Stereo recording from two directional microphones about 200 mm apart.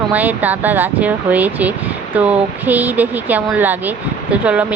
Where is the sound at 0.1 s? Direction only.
10° right (ahead or behind).